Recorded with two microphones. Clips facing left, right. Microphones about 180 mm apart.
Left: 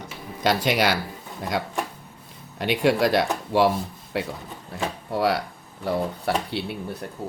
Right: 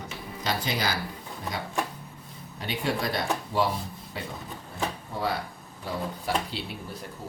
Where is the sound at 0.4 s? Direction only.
80° left.